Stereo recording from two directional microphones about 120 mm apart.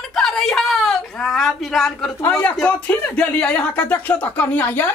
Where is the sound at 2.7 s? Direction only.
10° left (ahead or behind).